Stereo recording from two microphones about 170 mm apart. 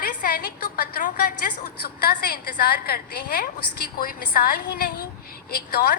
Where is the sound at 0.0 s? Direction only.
60° left (ahead or behind).